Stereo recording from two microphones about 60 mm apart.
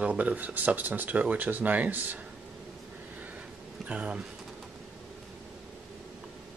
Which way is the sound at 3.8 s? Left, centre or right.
Centre.